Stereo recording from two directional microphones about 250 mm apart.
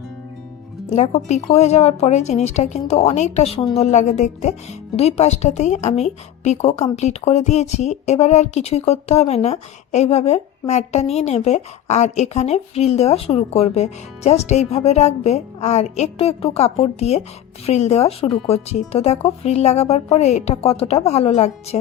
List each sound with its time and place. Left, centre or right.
0.9 s a woman's voice: left